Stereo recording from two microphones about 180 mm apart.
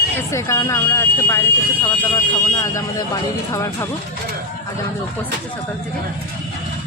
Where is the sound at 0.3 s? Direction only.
15° left (ahead or behind).